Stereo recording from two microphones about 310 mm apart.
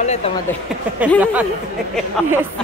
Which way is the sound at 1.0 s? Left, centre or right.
Centre.